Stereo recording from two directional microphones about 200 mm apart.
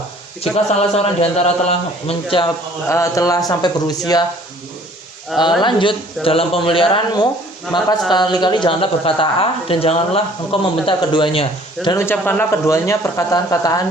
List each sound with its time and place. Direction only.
0.5 s a man's voice: 30° left (ahead or behind)
2.9 s speech: 15° left (ahead or behind)
5.3 s speech: centre (ahead or behind)
5.6 s speech: 25° left (ahead or behind)
11.9 s speech: 15° left (ahead or behind)